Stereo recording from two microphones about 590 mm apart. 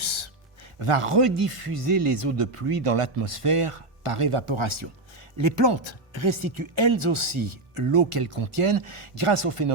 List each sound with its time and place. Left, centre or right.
0.0 s music: right
0.8 s speech: right